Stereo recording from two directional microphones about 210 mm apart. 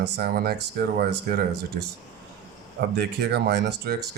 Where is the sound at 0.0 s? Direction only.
50° right (ahead or behind).